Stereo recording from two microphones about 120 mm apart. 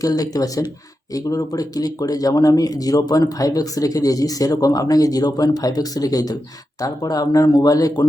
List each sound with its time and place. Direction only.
0.0 s speech: 30° left (ahead or behind)